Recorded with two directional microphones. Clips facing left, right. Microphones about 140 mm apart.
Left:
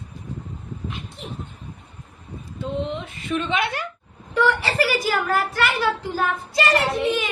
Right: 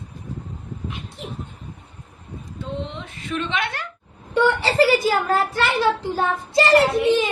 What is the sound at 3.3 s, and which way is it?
Speech, 5° left (ahead or behind).